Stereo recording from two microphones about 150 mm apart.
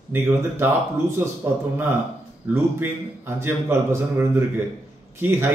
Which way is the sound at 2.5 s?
15° right (ahead or behind).